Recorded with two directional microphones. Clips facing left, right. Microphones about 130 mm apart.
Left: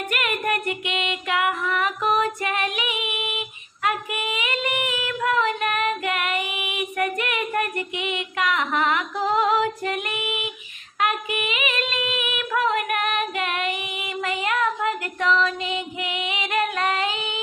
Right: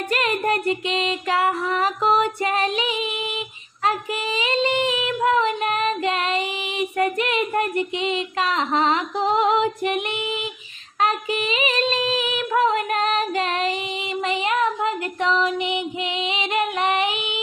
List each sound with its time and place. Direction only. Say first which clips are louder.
0.1 s music: right 4 dB; 30° right (ahead or behind)
3.8 s child singing: right 2 dB; 30° right (ahead or behind)
11.0 s a sound: right 2 dB; 30° right (ahead or behind)